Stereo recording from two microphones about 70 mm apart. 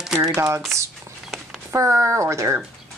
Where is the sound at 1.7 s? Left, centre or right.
Right.